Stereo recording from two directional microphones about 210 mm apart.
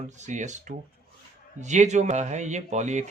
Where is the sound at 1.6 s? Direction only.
35° right (ahead or behind).